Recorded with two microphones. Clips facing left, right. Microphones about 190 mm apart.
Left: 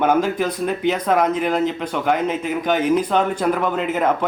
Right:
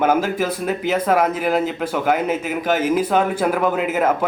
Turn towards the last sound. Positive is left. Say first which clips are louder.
# right 1 dB
turn(degrees=-5)  # may be behind; listen again after turning